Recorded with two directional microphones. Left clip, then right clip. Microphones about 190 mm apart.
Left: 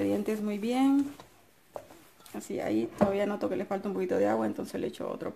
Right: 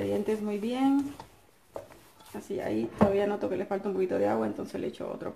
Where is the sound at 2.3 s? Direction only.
50° left (ahead or behind).